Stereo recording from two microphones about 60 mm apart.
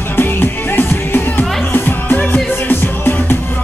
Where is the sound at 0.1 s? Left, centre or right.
Left.